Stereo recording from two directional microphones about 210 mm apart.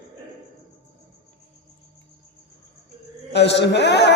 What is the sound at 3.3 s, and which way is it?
Speech, 55° left (ahead or behind).